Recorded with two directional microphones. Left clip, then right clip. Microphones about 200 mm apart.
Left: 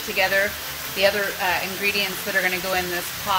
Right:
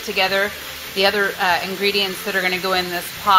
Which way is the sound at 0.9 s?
20° right (ahead or behind).